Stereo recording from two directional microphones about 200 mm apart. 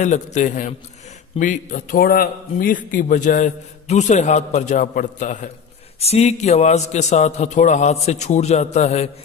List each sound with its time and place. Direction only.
0.0 s a man's voice: 35° left (ahead or behind)